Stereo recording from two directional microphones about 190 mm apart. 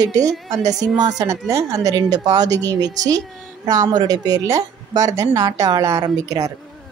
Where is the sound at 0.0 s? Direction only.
20° right (ahead or behind).